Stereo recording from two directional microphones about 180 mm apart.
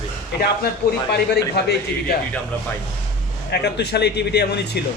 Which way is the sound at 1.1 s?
65° left (ahead or behind).